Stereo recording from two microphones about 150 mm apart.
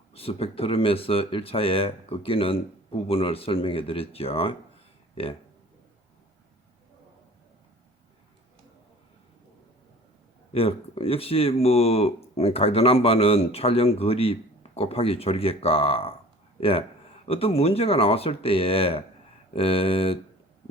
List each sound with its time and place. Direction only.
0.1 s speech: 40° left (ahead or behind)
10.5 s speech: 40° left (ahead or behind)